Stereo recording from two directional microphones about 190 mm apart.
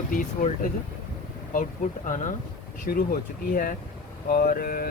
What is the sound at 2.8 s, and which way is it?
Speech, 50° left (ahead or behind).